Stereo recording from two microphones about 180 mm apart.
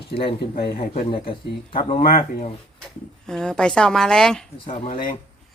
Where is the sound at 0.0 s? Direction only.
60° left (ahead or behind).